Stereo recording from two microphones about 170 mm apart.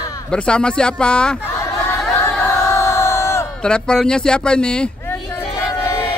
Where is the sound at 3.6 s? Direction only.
5° left (ahead or behind).